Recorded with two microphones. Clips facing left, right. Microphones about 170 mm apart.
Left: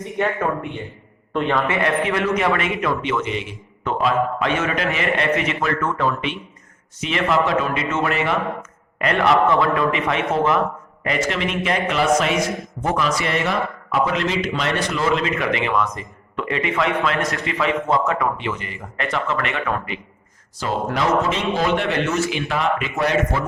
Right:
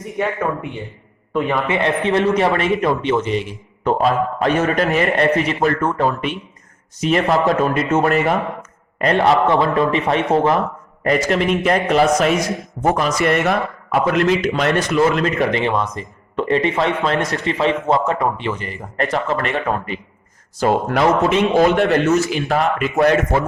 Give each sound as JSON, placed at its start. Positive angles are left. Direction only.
{"t": 0.1, "sound": "a man's voice", "side_deg": 0}
{"t": 1.6, "sound": "a man's voice", "side_deg": -20}
{"t": 20.6, "sound": "a man's voice", "side_deg": -55}
{"t": 21.7, "sound": "a man's voice", "side_deg": -45}